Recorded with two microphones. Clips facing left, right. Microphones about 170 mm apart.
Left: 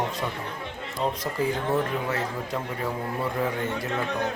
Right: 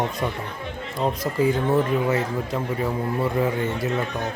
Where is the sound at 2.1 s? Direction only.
10° right (ahead or behind).